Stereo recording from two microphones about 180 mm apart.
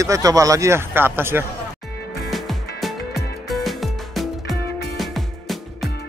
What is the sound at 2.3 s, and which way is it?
Music, centre (ahead or behind).